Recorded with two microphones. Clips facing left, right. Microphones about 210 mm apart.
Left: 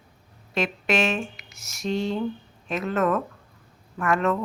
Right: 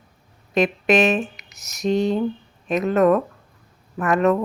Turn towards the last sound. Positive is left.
turn(degrees=-20)  # may be behind; listen again after turning